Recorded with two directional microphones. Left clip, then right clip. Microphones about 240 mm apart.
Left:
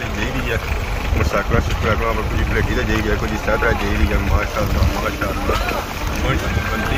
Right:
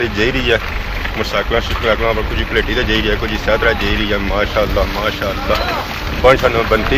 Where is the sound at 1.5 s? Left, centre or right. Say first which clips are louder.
Right 5 dB; centre.